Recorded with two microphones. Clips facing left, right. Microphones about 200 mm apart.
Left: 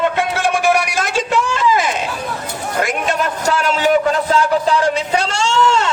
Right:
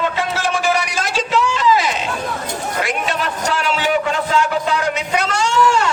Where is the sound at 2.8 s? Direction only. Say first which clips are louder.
Left 4 dB; 45° left (ahead or behind).